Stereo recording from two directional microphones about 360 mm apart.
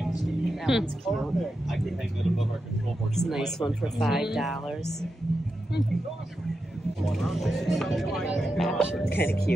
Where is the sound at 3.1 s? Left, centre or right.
Centre.